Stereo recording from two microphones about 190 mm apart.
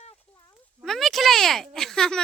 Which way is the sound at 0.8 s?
Centre (ahead or behind).